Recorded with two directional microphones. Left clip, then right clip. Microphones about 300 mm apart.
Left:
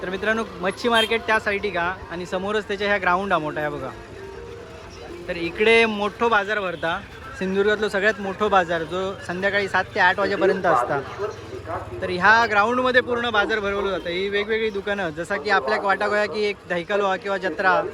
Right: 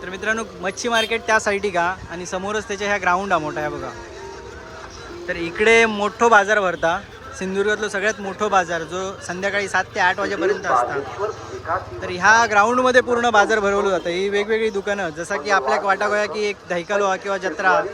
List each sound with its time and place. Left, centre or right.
0.0 s speech: centre
5.3 s speech: centre
11.2 s speech: right
12.0 s speech: centre